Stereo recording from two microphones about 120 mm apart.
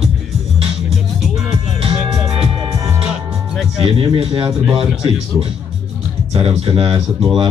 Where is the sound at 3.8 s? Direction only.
50° right (ahead or behind).